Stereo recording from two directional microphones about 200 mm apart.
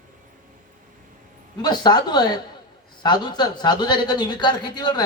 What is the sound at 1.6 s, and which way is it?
Speech, 20° left (ahead or behind).